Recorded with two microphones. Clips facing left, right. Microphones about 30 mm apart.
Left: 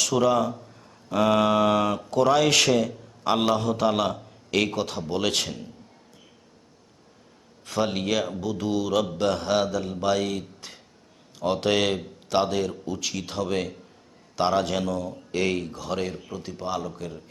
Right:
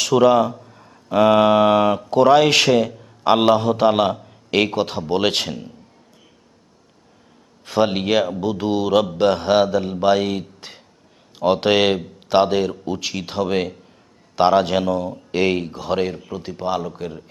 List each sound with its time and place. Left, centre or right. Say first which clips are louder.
0.0 s speech: right 7 dB; right
0.5 s a man's voice: right 3 dB; centre
5.5 s speech: right 6 dB; centre
7.6 s speech: right 7 dB; right